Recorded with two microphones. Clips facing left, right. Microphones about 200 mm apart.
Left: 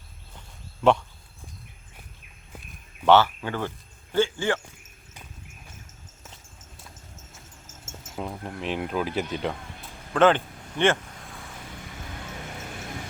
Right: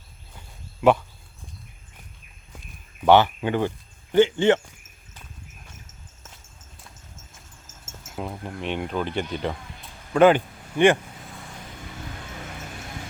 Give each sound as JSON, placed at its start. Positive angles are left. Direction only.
{"t": 0.8, "sound": "speech", "side_deg": -5}
{"t": 3.1, "sound": "speech", "side_deg": -20}
{"t": 8.0, "sound": "speech", "side_deg": 0}
{"t": 10.2, "sound": "speech", "side_deg": -10}